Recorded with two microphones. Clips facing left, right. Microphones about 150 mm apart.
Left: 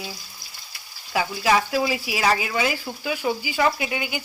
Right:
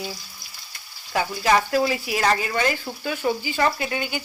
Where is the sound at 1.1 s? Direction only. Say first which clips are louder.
Right 1 dB; 5° left (ahead or behind).